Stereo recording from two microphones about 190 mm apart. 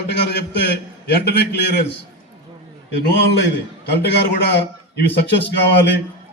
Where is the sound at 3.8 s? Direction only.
65° left (ahead or behind).